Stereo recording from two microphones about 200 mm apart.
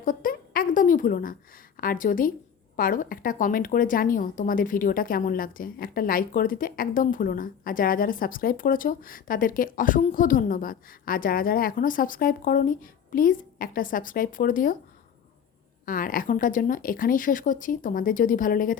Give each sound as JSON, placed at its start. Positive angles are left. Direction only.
{"t": 0.0, "sound": "a woman's voice", "side_deg": 45}
{"t": 15.9, "sound": "speech", "side_deg": 45}